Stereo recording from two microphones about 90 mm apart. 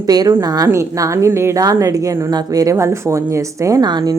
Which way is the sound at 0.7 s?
35° right (ahead or behind).